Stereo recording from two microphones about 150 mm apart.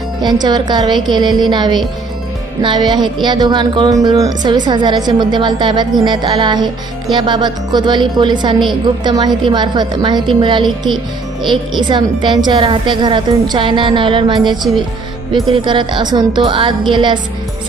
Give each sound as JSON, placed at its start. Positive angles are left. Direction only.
{"t": 0.2, "sound": "a woman's voice", "side_deg": -30}